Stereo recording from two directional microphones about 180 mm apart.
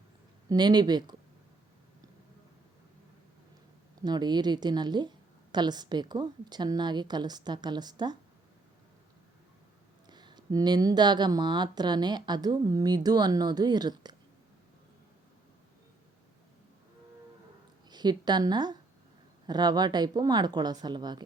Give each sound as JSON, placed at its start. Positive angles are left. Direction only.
{"t": 0.4, "sound": "speech", "side_deg": -25}
{"t": 4.0, "sound": "speech", "side_deg": -25}
{"t": 10.1, "sound": "speech", "side_deg": -25}
{"t": 17.8, "sound": "a woman's voice", "side_deg": -25}